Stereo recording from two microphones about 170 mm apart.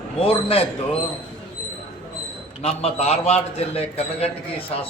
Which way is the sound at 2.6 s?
35° left (ahead or behind).